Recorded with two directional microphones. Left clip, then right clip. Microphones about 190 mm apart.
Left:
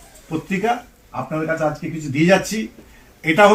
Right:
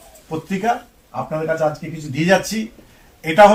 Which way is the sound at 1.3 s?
15° right (ahead or behind).